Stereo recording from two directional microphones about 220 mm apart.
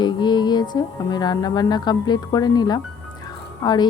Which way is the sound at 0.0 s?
20° left (ahead or behind).